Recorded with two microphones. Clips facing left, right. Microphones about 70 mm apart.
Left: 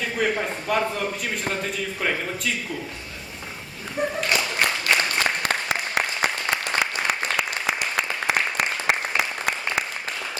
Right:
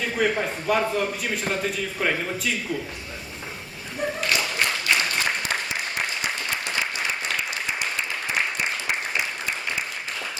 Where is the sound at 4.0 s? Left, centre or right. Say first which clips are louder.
Left 2 dB; left.